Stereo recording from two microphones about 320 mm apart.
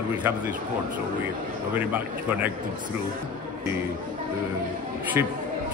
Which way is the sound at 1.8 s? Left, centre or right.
Centre.